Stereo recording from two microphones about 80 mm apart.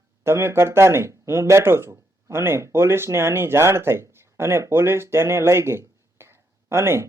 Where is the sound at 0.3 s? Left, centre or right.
Right.